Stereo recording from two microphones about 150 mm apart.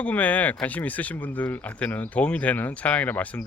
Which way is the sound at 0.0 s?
10° left (ahead or behind).